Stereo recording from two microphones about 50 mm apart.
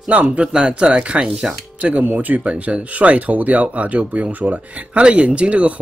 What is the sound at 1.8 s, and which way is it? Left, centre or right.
Speech, right.